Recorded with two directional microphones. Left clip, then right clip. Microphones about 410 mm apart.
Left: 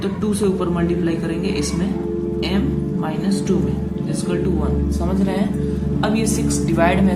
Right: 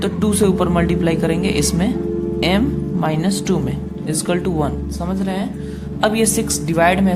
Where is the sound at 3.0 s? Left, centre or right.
Right.